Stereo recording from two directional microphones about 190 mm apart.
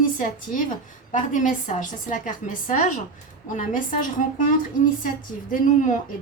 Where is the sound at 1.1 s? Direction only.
45° left (ahead or behind).